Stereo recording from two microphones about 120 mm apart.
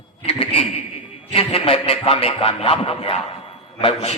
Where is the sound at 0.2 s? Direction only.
50° left (ahead or behind).